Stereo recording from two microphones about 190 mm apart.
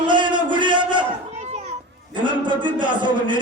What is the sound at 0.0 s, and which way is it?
Crowd, 25° right (ahead or behind).